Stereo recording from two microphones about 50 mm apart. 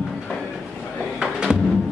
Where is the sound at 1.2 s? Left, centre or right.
Centre.